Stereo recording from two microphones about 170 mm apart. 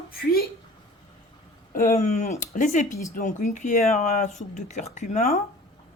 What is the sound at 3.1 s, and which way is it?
Speech, 50° left (ahead or behind).